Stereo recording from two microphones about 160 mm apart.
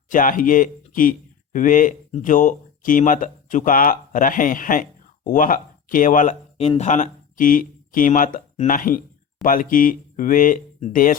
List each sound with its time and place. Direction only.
0.1 s speech: 55° left (ahead or behind)
6.6 s speech: 40° left (ahead or behind); by 11.2 s 60° left (ahead or behind)